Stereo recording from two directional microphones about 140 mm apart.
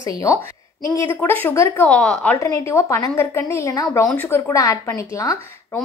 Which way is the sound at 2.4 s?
20° left (ahead or behind).